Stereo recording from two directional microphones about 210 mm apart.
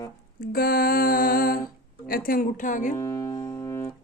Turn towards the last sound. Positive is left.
turn(degrees=10)  # may be behind; listen again after turning